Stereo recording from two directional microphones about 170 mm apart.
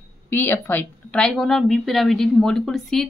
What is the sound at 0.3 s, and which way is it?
Speech, 10° left (ahead or behind).